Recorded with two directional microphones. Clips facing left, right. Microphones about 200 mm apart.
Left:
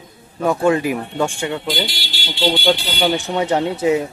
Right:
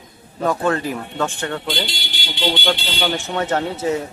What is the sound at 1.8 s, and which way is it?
Speech, 20° right (ahead or behind).